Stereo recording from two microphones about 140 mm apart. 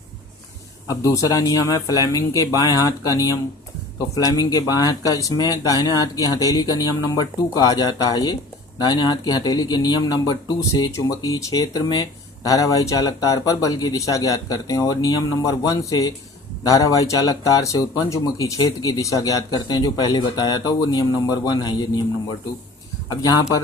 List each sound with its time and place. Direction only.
0.9 s speech: 25° left (ahead or behind)